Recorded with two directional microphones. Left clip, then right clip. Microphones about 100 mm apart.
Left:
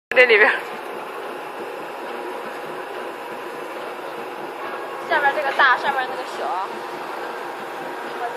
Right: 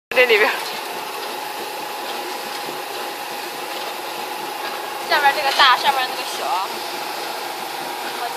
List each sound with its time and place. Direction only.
0.1 s speech: 30° right (ahead or behind)
5.1 s a woman's voice: 30° left (ahead or behind)